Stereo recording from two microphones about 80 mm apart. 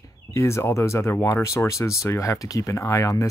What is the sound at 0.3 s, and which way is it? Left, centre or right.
Speech, left.